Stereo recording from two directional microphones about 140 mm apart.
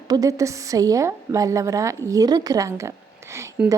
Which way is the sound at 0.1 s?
25° right (ahead or behind).